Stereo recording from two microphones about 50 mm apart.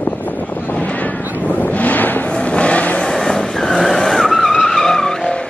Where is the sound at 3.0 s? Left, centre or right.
Centre.